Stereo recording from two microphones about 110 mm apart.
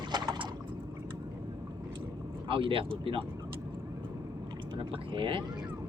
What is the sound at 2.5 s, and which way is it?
Speech, 50° right (ahead or behind).